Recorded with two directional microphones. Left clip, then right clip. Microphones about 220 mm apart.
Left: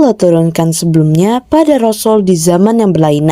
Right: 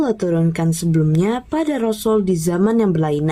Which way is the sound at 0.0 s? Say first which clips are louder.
Left 10 dB; 30° left (ahead or behind).